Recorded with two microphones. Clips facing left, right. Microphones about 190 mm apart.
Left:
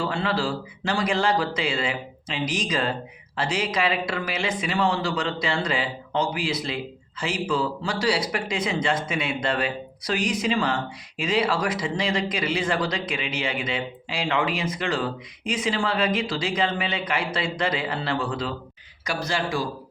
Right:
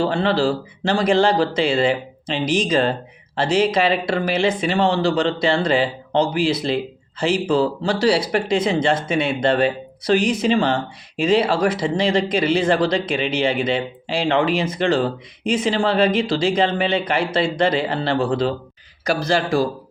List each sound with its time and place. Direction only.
0.0 s speech: 30° right (ahead or behind)